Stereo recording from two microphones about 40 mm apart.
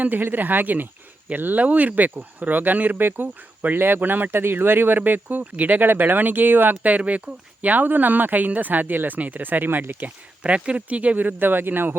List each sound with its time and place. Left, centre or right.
0.2 s speech: right
1.5 s speech: right
3.0 s speech: right
6.9 s speech: right
10.4 s speech: right
11.3 s speech: right